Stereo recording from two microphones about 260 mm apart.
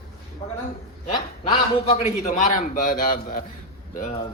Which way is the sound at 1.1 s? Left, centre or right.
Left.